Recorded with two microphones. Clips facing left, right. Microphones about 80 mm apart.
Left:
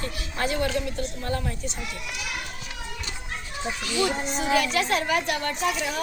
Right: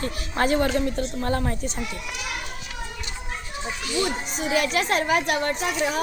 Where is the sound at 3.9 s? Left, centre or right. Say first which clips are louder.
Left 1 dB; left.